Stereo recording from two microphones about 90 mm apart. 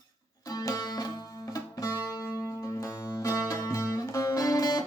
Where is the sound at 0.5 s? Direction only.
40° left (ahead or behind).